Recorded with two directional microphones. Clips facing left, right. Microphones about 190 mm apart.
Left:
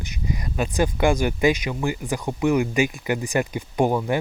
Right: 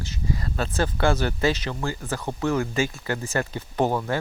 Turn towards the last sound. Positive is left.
turn(degrees=15)  # may be behind; listen again after turning